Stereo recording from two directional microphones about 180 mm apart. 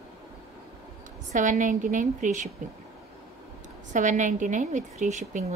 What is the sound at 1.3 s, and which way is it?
A woman's voice, 45° right (ahead or behind).